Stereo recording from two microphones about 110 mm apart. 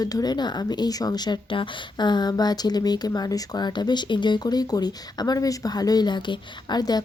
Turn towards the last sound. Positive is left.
turn(degrees=35)  # may be behind; listen again after turning